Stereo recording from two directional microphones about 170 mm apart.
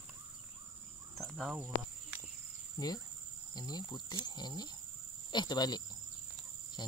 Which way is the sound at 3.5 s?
25° left (ahead or behind).